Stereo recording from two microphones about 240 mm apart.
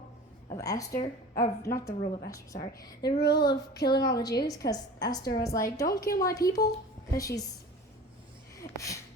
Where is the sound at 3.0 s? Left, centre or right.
Left.